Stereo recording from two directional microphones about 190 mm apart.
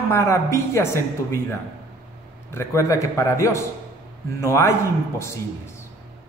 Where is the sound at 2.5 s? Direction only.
15° left (ahead or behind).